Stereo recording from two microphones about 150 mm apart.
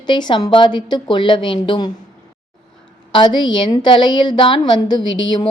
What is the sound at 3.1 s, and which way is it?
A woman's voice, 30° left (ahead or behind).